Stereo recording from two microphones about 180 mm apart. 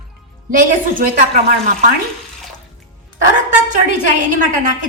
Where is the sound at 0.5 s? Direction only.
50° right (ahead or behind).